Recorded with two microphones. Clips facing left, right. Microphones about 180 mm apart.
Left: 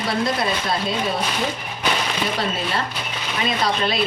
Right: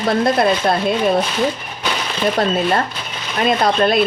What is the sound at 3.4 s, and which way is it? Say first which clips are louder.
Speech: right 7 dB; 55° right (ahead or behind).